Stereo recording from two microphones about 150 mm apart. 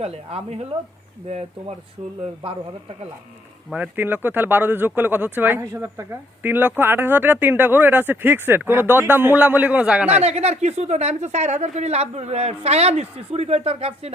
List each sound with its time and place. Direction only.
0.0 s a woman's voice: 40° right (ahead or behind)
3.7 s speech: 10° right (ahead or behind)
10.2 s a woman's voice: 45° right (ahead or behind)